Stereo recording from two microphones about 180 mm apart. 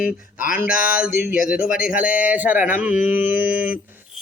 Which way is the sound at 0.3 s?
50° left (ahead or behind).